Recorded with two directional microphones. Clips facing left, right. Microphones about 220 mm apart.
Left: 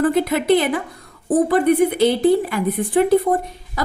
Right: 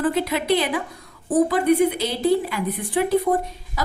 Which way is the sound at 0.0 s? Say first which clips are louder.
Left 5 dB; 50° left (ahead or behind).